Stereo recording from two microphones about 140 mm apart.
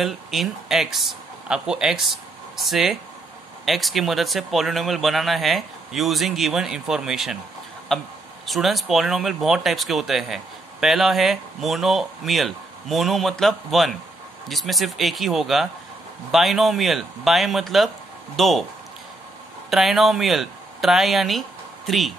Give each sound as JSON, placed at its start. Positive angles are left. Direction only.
{"t": 0.0, "sound": "speech", "side_deg": 0}
{"t": 19.7, "sound": "speech", "side_deg": 0}